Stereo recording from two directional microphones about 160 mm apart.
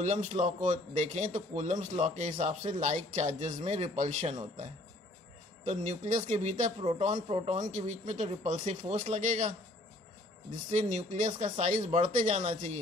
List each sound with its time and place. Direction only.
0.0 s a man's voice: 45° right (ahead or behind)
5.7 s a man's voice: 50° right (ahead or behind)
7.5 s a man's voice: 50° right (ahead or behind)
10.7 s a man's voice: 50° right (ahead or behind)